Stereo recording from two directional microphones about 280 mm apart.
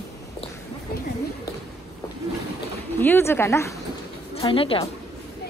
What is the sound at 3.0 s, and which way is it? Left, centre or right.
A woman's voice, centre.